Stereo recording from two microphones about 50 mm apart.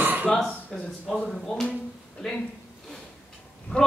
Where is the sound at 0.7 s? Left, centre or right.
Centre.